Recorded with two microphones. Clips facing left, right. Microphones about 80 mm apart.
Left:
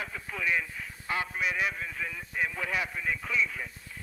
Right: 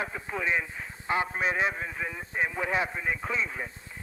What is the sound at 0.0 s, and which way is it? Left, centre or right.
Speech, right.